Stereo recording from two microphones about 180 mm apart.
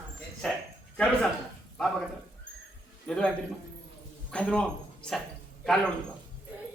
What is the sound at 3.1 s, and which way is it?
A man's voice, 5° left (ahead or behind).